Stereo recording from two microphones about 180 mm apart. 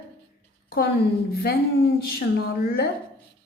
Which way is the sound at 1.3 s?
60° left (ahead or behind).